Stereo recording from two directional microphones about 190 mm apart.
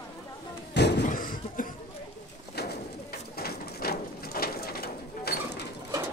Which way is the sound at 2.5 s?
55° left (ahead or behind).